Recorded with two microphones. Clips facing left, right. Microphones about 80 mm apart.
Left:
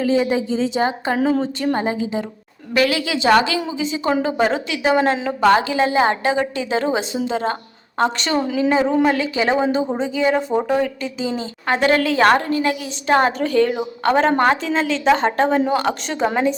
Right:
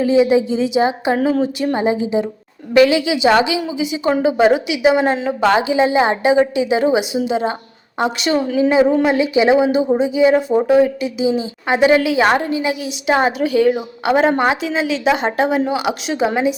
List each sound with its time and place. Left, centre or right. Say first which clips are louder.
0.0 s a woman's voice: right 5 dB; centre